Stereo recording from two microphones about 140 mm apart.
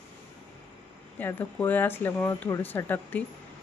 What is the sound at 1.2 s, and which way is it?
Speech, 15° left (ahead or behind).